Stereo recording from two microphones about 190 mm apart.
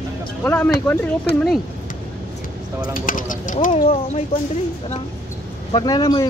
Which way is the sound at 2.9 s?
45° left (ahead or behind).